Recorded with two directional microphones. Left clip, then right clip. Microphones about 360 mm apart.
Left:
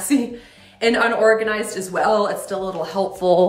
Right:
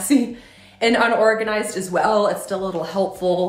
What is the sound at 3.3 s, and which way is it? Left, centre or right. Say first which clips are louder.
Speech: left 6 dB; centre.